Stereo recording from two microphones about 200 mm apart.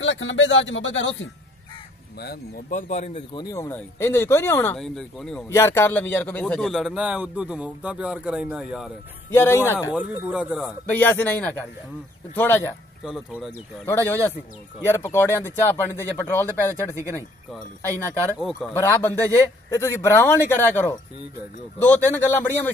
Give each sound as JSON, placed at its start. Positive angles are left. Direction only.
{"t": 0.0, "sound": "speech", "side_deg": 70}
{"t": 2.1, "sound": "speech", "side_deg": 50}
{"t": 3.3, "sound": "a man's voice", "side_deg": 15}
{"t": 5.5, "sound": "a man's voice", "side_deg": 15}
{"t": 9.3, "sound": "speech", "side_deg": 10}
{"t": 9.9, "sound": "speech", "side_deg": -5}
{"t": 10.9, "sound": "speech", "side_deg": 10}
{"t": 13.0, "sound": "a man's voice", "side_deg": 0}
{"t": 13.8, "sound": "a man's voice", "side_deg": 10}
{"t": 18.8, "sound": "speech", "side_deg": 10}